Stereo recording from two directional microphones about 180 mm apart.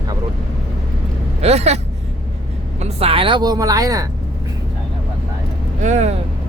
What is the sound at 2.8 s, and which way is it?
A woman's voice, 30° right (ahead or behind).